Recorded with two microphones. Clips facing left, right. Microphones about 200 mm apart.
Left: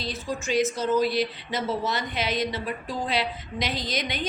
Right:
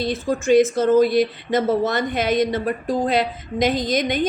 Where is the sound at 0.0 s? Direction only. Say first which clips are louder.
Right 9 dB; 50° right (ahead or behind).